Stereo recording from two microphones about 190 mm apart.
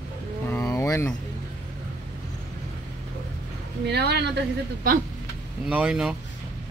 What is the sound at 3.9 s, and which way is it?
Speech, 60° right (ahead or behind).